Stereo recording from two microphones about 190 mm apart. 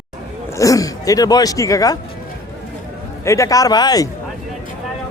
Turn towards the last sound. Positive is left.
turn(degrees=20)  # may be behind; listen again after turning